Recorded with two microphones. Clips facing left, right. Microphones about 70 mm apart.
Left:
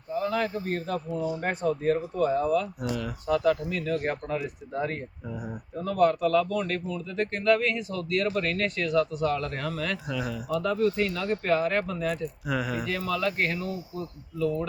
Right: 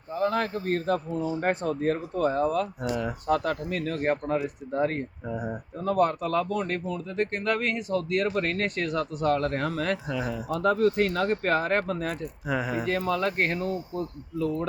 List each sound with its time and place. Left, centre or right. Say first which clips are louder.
0.1 s speech: right 1 dB; right
2.9 s speech: right 3 dB; right
3.2 s speech: left 3 dB; right
6.8 s speech: right 1 dB; right
10.1 s speech: right 2 dB; right
10.5 s speech: right 2 dB; right
12.9 s speech: right 3 dB; right